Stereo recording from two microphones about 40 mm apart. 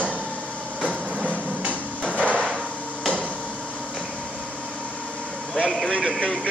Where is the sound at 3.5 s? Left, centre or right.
Right.